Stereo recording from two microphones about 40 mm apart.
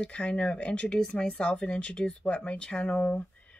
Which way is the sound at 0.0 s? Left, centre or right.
Left.